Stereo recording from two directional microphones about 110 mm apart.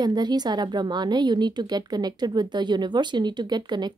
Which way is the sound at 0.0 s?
40° right (ahead or behind).